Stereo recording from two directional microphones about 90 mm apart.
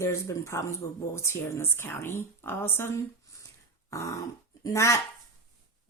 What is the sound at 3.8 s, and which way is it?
Throat clearing, 35° left (ahead or behind).